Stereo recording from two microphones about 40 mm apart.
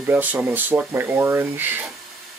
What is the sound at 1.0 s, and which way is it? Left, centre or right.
Speech, right.